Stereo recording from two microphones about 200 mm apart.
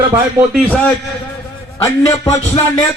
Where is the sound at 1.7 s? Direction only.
15° left (ahead or behind).